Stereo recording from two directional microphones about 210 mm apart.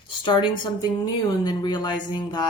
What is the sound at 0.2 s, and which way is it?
A woman's voice, 20° left (ahead or behind).